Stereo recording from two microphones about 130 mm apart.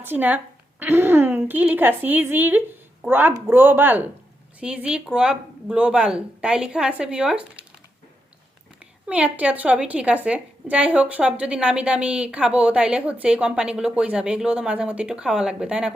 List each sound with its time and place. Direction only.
0.0 s speech: 15° right (ahead or behind)
8.8 s speech: 10° right (ahead or behind)